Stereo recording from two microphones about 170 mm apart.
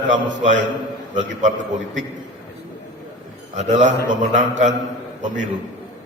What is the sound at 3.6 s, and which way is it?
Speech, 45° right (ahead or behind).